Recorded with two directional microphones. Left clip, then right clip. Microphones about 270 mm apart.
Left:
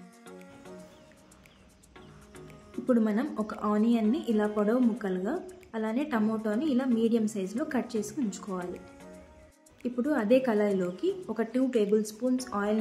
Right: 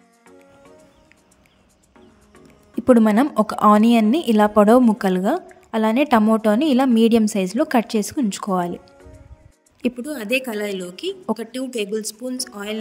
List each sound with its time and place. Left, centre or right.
2.9 s a woman's voice: right
9.8 s a woman's voice: right